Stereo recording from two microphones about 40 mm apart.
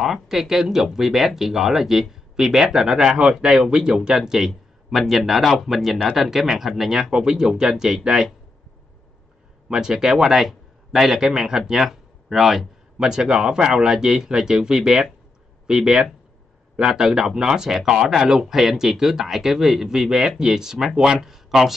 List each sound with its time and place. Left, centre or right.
0.0 s speech: centre
9.7 s speech: centre
13.0 s speech: centre